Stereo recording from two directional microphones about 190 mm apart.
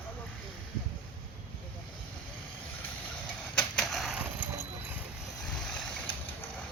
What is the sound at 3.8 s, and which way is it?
Skateboard, centre (ahead or behind).